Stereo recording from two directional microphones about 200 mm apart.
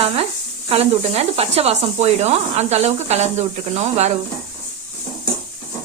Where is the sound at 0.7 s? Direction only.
30° right (ahead or behind).